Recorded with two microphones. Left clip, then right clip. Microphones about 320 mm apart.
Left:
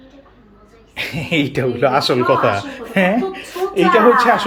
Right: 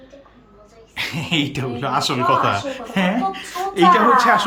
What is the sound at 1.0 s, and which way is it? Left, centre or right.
Speech, centre.